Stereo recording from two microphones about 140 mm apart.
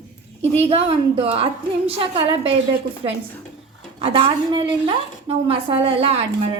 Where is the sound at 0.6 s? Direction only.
45° right (ahead or behind).